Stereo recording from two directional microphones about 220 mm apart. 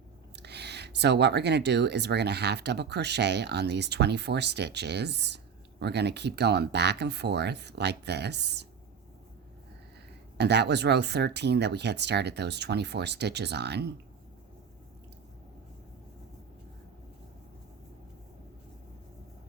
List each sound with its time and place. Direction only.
0.3 s speech: 50° right (ahead or behind)
10.3 s speech: 50° right (ahead or behind)